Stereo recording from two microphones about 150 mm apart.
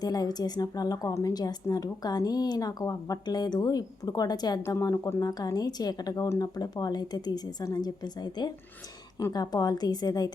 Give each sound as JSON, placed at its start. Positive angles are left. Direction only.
{"t": 0.0, "sound": "a woman's voice", "side_deg": 25}